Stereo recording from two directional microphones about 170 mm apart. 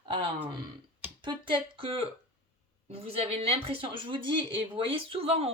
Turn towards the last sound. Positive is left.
turn(degrees=-35)  # may be behind; listen again after turning